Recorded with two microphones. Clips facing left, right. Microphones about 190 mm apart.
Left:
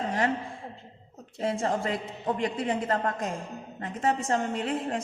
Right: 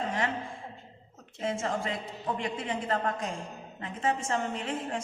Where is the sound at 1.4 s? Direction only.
35° left (ahead or behind).